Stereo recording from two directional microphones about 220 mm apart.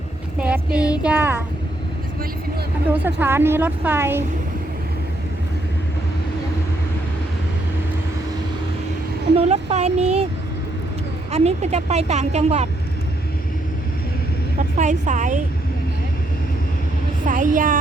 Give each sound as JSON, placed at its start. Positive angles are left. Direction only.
{"t": 0.3, "sound": "speech", "side_deg": -5}
{"t": 2.9, "sound": "speech", "side_deg": -10}
{"t": 9.3, "sound": "speech", "side_deg": -25}
{"t": 11.3, "sound": "speech", "side_deg": -30}
{"t": 14.8, "sound": "a woman's voice", "side_deg": -35}
{"t": 17.2, "sound": "a woman's voice", "side_deg": -35}